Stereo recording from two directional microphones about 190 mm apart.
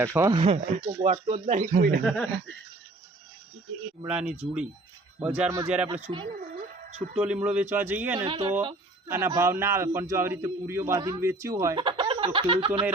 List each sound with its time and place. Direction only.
0.0 s a man's voice: 15° right (ahead or behind)
0.4 s speech: 30° right (ahead or behind)
2.0 s speech: 5° left (ahead or behind)
4.0 s a man's voice: 5° right (ahead or behind)
5.9 s speech: 25° right (ahead or behind)
7.2 s a man's voice: 5° right (ahead or behind)
8.3 s speech: 30° right (ahead or behind)
9.0 s a man's voice: 15° right (ahead or behind)